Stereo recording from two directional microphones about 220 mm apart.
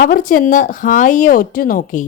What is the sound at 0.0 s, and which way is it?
A woman's voice, 40° left (ahead or behind).